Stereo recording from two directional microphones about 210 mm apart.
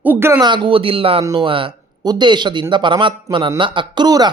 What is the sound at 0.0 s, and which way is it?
Speech, 10° right (ahead or behind).